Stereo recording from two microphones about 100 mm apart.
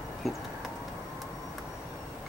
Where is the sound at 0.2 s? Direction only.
Centre (ahead or behind).